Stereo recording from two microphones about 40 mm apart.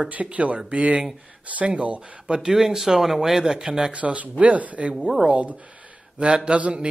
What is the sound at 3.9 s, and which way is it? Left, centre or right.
Speech, right.